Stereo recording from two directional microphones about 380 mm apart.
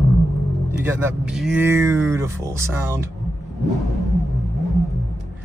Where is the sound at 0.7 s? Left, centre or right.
Centre.